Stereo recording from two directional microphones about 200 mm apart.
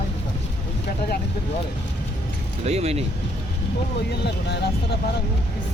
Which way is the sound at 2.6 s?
30° right (ahead or behind).